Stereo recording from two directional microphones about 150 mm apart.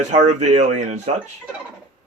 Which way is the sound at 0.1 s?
50° right (ahead or behind).